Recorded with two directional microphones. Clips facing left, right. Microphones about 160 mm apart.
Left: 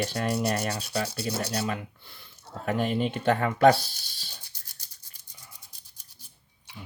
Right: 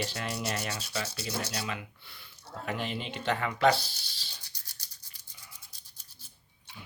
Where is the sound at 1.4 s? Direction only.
45° left (ahead or behind).